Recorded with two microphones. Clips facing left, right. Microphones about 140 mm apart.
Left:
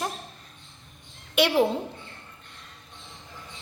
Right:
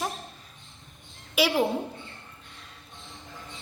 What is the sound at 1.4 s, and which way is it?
Speech, 5° right (ahead or behind).